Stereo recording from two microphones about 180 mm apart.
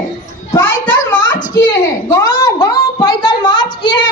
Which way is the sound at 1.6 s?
20° left (ahead or behind).